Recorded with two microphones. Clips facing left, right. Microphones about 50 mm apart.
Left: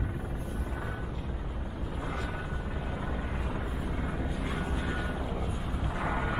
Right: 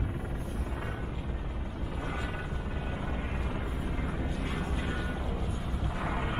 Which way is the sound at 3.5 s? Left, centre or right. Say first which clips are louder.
Left 1 dB; centre.